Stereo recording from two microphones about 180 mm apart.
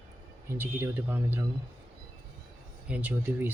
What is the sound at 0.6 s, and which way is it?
Speech, 10° right (ahead or behind).